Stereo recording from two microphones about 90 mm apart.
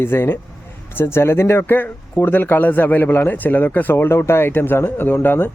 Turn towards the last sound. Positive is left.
turn(degrees=25)  # may be behind; listen again after turning